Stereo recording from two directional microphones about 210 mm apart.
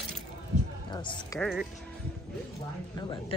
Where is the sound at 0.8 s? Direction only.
20° left (ahead or behind).